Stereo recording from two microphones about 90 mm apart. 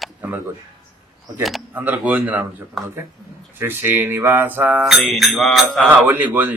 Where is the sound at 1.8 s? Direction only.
20° right (ahead or behind).